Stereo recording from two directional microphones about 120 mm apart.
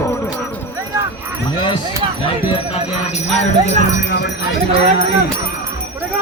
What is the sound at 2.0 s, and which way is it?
Speech, 50° right (ahead or behind).